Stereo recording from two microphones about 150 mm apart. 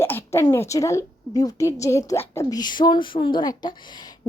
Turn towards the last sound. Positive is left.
turn(degrees=30)  # may be behind; listen again after turning